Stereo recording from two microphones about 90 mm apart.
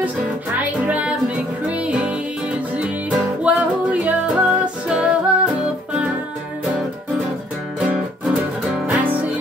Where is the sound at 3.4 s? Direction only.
15° right (ahead or behind).